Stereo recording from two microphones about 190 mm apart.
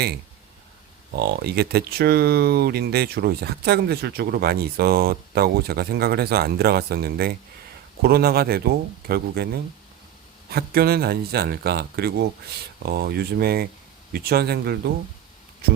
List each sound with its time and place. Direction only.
1.1 s speech: 55° right (ahead or behind)
10.5 s speech: 55° right (ahead or behind)